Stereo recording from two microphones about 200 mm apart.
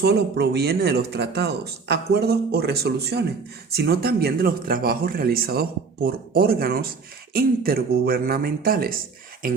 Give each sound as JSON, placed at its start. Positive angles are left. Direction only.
{"t": 0.0, "sound": "speech", "side_deg": -55}